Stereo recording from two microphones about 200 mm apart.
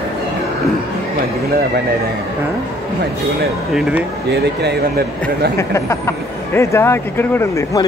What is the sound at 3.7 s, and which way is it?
Speech, 5° right (ahead or behind).